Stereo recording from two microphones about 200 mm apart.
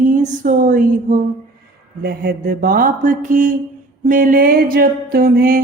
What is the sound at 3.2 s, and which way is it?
Speech, 40° right (ahead or behind).